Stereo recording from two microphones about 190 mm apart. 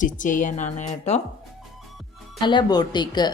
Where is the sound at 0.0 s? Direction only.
45° left (ahead or behind).